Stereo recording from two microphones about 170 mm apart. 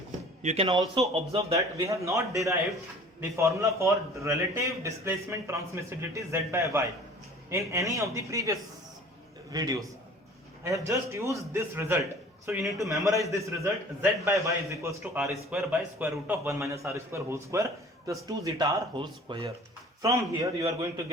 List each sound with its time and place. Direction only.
0.4 s speech: 35° right (ahead or behind)
0.7 s a man's voice: 20° right (ahead or behind)
1.1 s speech: 35° right (ahead or behind)
1.5 s a man's voice: 20° right (ahead or behind)
12.8 s speech: centre (ahead or behind)
13.6 s a man's voice: 15° right (ahead or behind)
15.2 s speech: centre (ahead or behind)
16.0 s a man's voice: 10° right (ahead or behind)